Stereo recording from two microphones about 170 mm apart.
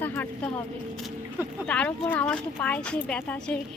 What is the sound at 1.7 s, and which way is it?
Speech, 5° left (ahead or behind).